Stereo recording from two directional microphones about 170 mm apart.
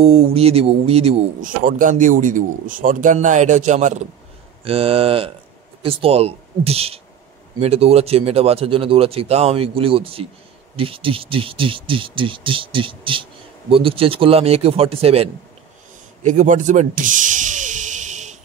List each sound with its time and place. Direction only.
0.0 s speech: 35° right (ahead or behind)
1.4 s a man's voice: 55° right (ahead or behind)
4.6 s speech: 35° right (ahead or behind)
16.2 s a sound: 45° right (ahead or behind)